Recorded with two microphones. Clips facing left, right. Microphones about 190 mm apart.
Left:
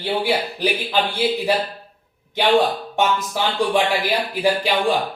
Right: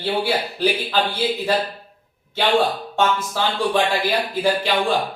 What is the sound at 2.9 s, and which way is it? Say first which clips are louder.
Speech: right 1 dB; 15° left (ahead or behind).